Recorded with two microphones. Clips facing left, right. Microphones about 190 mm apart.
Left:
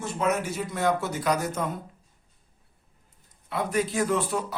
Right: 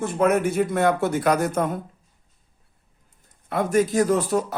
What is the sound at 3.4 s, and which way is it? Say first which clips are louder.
A man's voice: right 6 dB; 45° right (ahead or behind).